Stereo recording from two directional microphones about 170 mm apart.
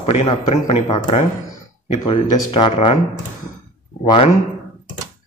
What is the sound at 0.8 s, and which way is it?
Speech, 25° left (ahead or behind).